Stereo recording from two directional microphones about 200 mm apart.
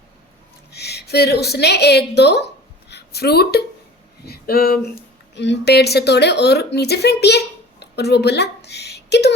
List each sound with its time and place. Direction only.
0.7 s a woman's voice: 55° left (ahead or behind)
2.9 s a sound: 55° left (ahead or behind)
4.3 s speech: 50° left (ahead or behind)
5.3 s a woman's voice: 60° left (ahead or behind)